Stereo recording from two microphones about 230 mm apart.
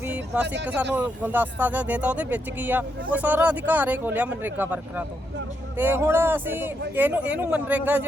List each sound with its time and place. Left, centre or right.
0.0 s a sound: centre
0.4 s speech: right
0.7 s speech: centre